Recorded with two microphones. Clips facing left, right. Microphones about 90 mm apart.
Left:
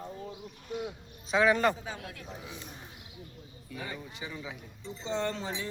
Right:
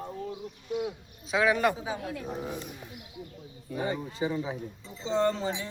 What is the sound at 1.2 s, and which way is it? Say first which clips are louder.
Speech: even; 5° right (ahead or behind).